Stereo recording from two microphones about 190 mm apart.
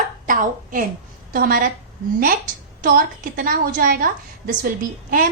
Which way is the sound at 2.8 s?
50° right (ahead or behind).